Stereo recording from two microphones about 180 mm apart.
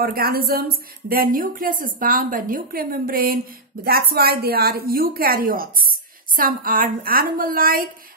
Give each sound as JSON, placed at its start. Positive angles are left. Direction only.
{"t": 0.0, "sound": "a woman's voice", "side_deg": -55}